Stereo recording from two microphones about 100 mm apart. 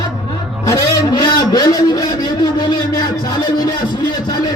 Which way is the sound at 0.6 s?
40° left (ahead or behind).